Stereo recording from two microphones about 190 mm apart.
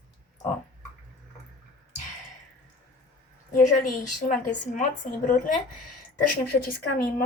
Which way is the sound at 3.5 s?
40° left (ahead or behind).